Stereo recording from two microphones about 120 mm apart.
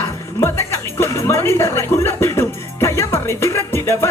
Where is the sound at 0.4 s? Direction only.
20° left (ahead or behind).